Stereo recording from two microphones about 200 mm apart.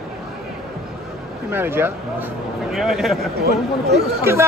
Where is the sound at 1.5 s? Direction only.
10° right (ahead or behind).